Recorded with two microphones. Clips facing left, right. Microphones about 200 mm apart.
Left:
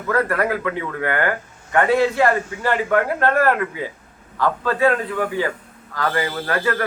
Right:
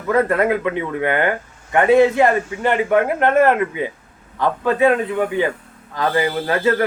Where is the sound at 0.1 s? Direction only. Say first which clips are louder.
Right 4 dB; 20° right (ahead or behind).